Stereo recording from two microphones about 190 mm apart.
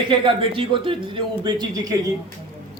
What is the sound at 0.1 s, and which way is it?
A man's voice, 25° right (ahead or behind).